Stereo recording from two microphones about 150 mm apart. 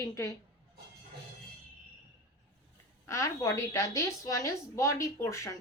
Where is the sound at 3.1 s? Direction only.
20° left (ahead or behind).